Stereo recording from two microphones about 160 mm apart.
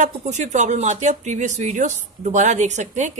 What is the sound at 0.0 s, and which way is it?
Speech, 45° right (ahead or behind).